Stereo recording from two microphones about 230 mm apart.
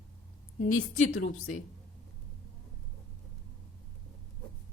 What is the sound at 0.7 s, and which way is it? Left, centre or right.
Speech, left.